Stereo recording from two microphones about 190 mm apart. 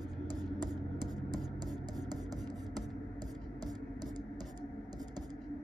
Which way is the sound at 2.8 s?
20° right (ahead or behind).